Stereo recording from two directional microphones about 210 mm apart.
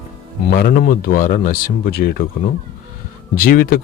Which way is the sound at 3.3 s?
45° left (ahead or behind).